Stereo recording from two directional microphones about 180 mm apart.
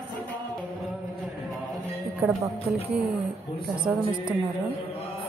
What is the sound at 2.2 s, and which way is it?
Speech, 10° right (ahead or behind).